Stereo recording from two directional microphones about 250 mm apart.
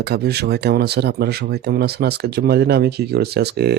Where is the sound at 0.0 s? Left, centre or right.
Right.